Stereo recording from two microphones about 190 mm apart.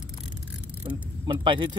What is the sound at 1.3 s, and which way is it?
Speech, 25° right (ahead or behind).